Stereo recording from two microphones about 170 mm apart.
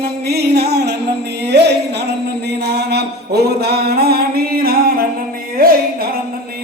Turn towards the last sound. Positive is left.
turn(degrees=-60)  # may be behind; listen again after turning